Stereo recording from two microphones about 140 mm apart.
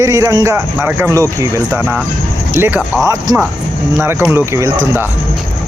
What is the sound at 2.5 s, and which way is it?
Speech, 15° right (ahead or behind).